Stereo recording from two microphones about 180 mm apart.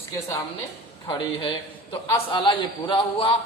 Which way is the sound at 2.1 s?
25° left (ahead or behind).